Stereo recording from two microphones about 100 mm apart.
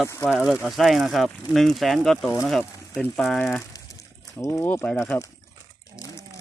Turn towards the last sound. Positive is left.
turn(degrees=15)  # may be behind; listen again after turning